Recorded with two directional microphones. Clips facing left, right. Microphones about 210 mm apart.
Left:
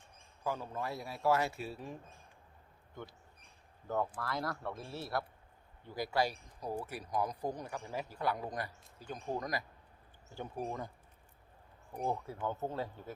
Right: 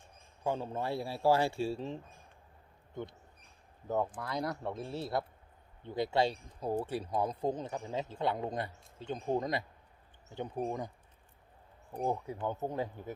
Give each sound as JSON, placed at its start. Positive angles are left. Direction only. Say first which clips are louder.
{"t": 0.4, "sound": "a man's voice", "louder": "right 4 dB", "side_deg": -25}
{"t": 3.8, "sound": "a man's voice", "louder": "right 2 dB", "side_deg": -20}
{"t": 12.0, "sound": "speech", "louder": "right 2 dB", "side_deg": -15}